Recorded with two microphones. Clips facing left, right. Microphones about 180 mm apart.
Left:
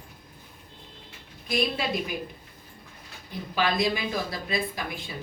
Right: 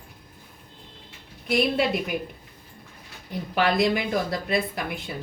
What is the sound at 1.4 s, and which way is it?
Speech, 65° right (ahead or behind).